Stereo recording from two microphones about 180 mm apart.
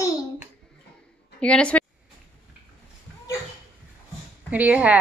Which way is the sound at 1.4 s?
5° left (ahead or behind).